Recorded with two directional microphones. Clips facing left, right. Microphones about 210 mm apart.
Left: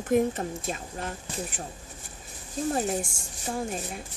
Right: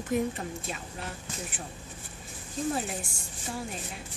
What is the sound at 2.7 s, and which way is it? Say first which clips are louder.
Speech: left 6 dB; 45° left (ahead or behind).